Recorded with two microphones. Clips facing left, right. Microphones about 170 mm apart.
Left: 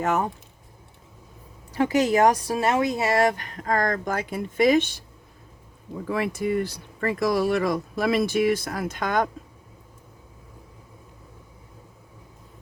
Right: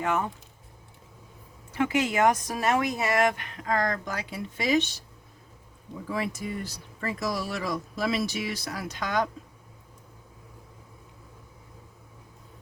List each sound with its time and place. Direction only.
0.0 s speech: 40° left (ahead or behind)
1.7 s speech: 35° left (ahead or behind); by 5.0 s 55° left (ahead or behind)
6.1 s speech: 60° left (ahead or behind)